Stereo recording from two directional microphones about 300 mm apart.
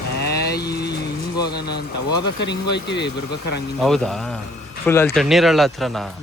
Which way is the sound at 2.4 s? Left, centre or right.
Left.